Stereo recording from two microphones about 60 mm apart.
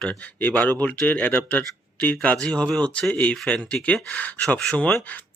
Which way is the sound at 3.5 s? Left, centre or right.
Left.